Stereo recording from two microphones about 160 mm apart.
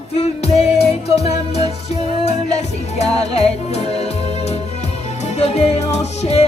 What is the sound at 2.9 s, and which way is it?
Music, 40° left (ahead or behind).